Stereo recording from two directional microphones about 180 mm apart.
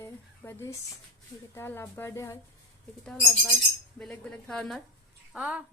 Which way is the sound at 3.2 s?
Centre (ahead or behind).